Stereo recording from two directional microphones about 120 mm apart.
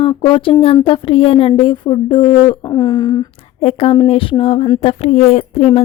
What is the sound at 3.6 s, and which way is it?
A woman's voice, 55° left (ahead or behind).